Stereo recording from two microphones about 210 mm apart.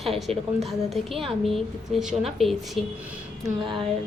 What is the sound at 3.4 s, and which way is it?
Speech, 20° right (ahead or behind).